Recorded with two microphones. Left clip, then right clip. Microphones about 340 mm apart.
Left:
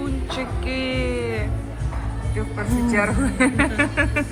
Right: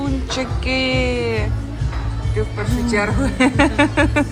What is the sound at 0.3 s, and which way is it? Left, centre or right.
Speech, centre.